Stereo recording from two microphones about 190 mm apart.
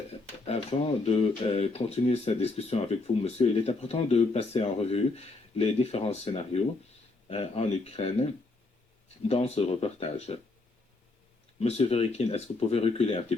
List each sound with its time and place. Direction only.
0.4 s speech: 35° left (ahead or behind)
9.2 s speech: 35° left (ahead or behind)
11.6 s speech: 35° left (ahead or behind)